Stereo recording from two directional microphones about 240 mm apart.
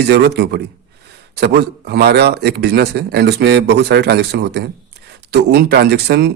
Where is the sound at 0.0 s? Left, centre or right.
Right.